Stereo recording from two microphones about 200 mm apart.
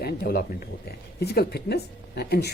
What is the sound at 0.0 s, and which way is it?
Speech, 50° left (ahead or behind).